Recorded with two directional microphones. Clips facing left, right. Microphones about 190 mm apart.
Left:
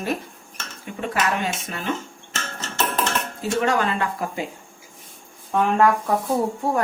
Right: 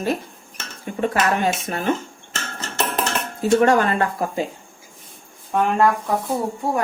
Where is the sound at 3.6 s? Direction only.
50° right (ahead or behind).